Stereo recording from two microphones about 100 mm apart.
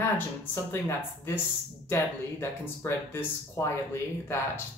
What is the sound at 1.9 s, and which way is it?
Speech, 25° left (ahead or behind).